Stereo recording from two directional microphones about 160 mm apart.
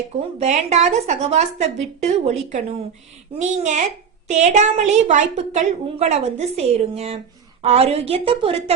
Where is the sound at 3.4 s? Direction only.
50° right (ahead or behind).